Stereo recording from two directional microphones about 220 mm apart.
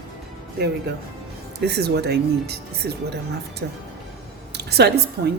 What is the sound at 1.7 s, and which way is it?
A woman's voice, 45° right (ahead or behind).